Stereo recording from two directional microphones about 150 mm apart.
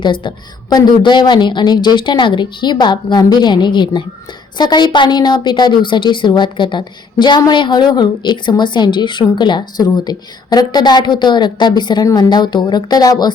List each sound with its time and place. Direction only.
0.0 s a woman's voice: 30° left (ahead or behind)